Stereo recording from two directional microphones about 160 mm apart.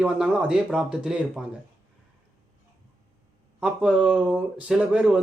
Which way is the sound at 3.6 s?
5° right (ahead or behind).